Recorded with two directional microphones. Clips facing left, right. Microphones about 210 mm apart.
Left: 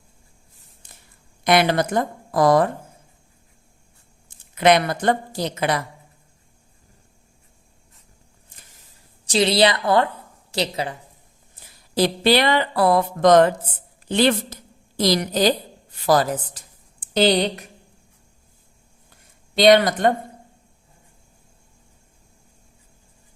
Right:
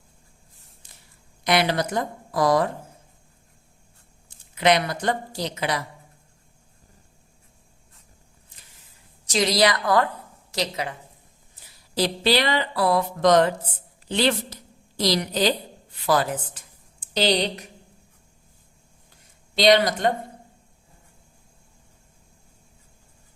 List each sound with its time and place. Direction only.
1.5 s speech: 50° left (ahead or behind)
4.5 s speech: 50° left (ahead or behind)
9.2 s a woman's voice: 30° left (ahead or behind)
11.9 s a woman's voice: 55° left (ahead or behind)
17.2 s speech: 55° left (ahead or behind)
19.5 s speech: 55° left (ahead or behind)